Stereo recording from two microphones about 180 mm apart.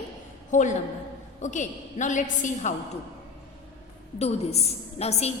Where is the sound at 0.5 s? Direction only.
40° left (ahead or behind).